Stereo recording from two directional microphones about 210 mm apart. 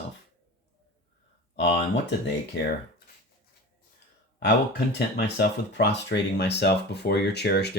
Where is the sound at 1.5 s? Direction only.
55° left (ahead or behind).